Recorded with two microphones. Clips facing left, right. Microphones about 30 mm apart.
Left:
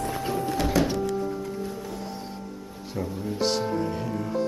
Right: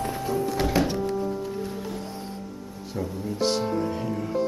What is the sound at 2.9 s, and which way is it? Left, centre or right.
Speech, centre.